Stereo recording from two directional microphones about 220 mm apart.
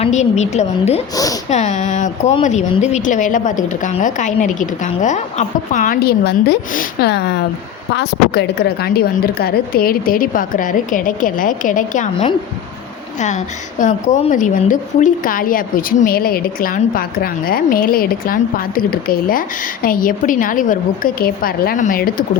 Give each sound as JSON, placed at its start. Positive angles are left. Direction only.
{"t": 0.0, "sound": "a woman's voice", "side_deg": 30}
{"t": 1.1, "sound": "speech", "side_deg": 15}
{"t": 1.5, "sound": "a woman's voice", "side_deg": 30}